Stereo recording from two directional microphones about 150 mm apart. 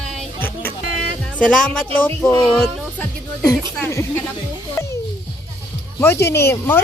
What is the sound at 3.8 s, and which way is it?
Speech, 15° left (ahead or behind).